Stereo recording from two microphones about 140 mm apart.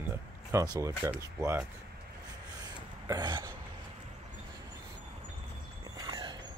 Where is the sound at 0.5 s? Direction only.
25° right (ahead or behind).